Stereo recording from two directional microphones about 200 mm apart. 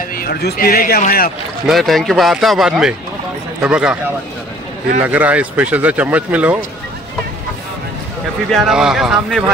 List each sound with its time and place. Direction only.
0.1 s speech: 50° left (ahead or behind)
1.7 s speech: centre (ahead or behind)
5.0 s speech: 10° right (ahead or behind)
8.5 s speech: centre (ahead or behind)